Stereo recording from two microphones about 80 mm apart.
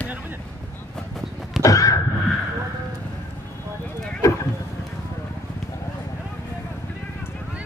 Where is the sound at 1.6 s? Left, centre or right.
Left.